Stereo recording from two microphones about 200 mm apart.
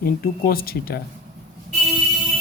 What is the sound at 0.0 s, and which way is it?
Speech, 50° left (ahead or behind).